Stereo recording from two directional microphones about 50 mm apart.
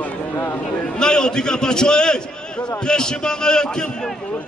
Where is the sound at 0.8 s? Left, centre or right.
Centre.